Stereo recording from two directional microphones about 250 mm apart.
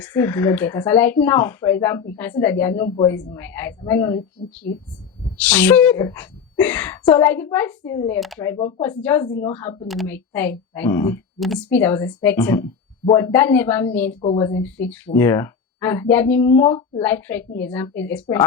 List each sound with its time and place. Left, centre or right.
0.1 s speech: centre
4.4 s speech: centre
5.4 s speech: centre
14.2 s speech: left
14.5 s speech: centre
16.5 s speech: left
17.0 s speech: centre